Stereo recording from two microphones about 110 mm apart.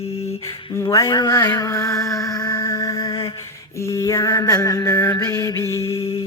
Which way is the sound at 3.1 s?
55° left (ahead or behind).